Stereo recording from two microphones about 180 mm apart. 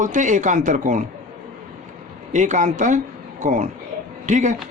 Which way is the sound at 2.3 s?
45° right (ahead or behind).